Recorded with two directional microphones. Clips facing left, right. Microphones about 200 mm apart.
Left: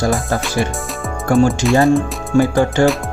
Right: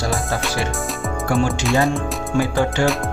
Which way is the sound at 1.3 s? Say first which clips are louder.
Left 6 dB; 45° left (ahead or behind).